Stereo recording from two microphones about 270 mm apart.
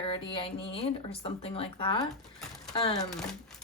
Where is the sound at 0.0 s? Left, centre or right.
Centre.